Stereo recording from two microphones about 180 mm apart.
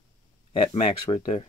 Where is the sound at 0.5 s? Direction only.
35° left (ahead or behind).